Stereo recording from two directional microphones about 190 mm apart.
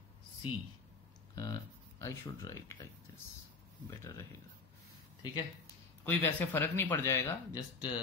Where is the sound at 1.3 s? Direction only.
20° left (ahead or behind).